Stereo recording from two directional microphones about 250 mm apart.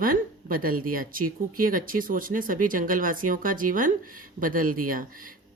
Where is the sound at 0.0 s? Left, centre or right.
Right.